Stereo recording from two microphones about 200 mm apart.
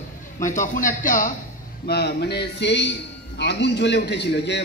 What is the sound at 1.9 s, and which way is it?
A man's voice, 55° left (ahead or behind).